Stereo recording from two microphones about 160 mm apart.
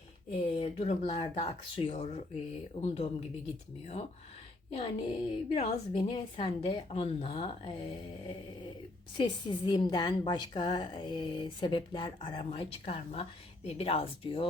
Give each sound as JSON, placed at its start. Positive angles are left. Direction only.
{"t": 0.3, "sound": "a woman's voice", "side_deg": 40}
{"t": 4.7, "sound": "a woman's voice", "side_deg": 30}
{"t": 9.1, "sound": "a woman's voice", "side_deg": 30}